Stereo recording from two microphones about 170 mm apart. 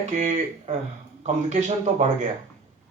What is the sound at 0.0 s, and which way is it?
Speech, 45° right (ahead or behind).